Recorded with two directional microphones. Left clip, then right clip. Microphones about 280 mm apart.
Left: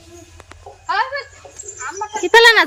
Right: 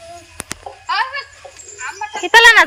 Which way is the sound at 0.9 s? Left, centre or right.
Centre.